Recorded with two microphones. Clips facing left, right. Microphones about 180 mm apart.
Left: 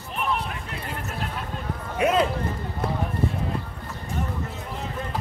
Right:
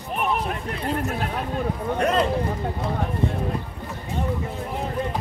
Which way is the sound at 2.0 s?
5° left (ahead or behind).